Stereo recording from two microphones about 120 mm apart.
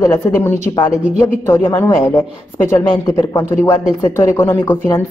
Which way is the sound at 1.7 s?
20° left (ahead or behind).